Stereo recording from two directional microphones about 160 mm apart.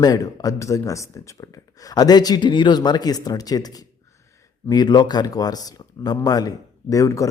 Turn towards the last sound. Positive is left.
turn(degrees=20)  # may be behind; listen again after turning